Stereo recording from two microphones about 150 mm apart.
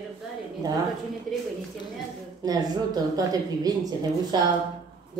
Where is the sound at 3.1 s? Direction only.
25° right (ahead or behind).